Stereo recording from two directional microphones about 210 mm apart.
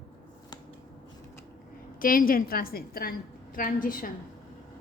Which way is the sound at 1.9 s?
40° left (ahead or behind).